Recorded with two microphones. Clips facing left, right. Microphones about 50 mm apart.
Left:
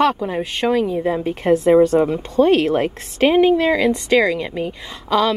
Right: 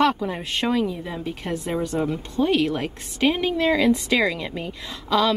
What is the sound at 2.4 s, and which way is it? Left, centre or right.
Speech, left.